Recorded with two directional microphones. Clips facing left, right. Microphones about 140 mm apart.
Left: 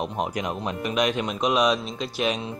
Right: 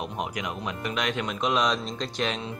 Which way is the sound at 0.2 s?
30° left (ahead or behind).